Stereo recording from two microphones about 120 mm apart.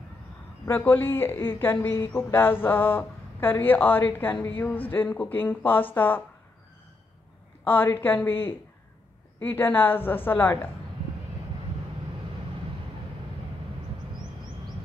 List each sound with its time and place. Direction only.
0.7 s speech: 15° left (ahead or behind)
7.6 s speech: 15° left (ahead or behind)